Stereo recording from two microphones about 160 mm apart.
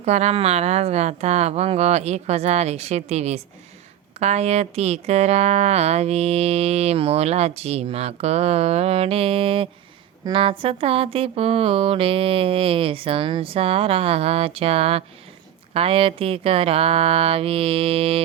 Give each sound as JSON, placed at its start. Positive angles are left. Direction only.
{"t": 0.0, "sound": "speech", "side_deg": -45}